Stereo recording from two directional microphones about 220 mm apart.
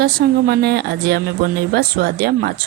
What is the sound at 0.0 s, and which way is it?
A woman's voice, 45° right (ahead or behind).